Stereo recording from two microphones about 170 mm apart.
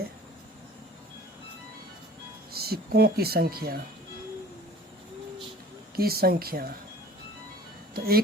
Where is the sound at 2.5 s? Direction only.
65° right (ahead or behind).